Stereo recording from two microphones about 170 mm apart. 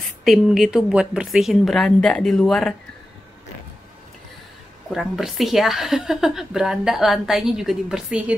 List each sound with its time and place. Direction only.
0.2 s a woman's voice: centre (ahead or behind)
4.9 s a woman's voice: centre (ahead or behind)